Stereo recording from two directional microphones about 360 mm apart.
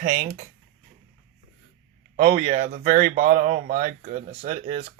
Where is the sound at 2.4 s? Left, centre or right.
Centre.